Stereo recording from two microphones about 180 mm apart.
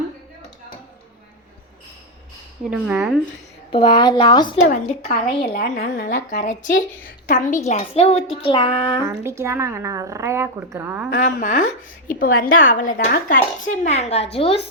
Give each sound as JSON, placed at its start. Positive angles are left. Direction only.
{"t": 2.6, "sound": "speech", "side_deg": -5}
{"t": 3.7, "sound": "speech", "side_deg": 25}
{"t": 4.7, "sound": "a woman's voice", "side_deg": 40}
{"t": 5.5, "sound": "speech", "side_deg": 55}
{"t": 9.2, "sound": "speech", "side_deg": -15}
{"t": 11.3, "sound": "a woman's voice", "side_deg": 50}